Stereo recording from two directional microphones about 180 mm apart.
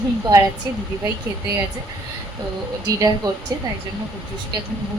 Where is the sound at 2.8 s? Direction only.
20° right (ahead or behind).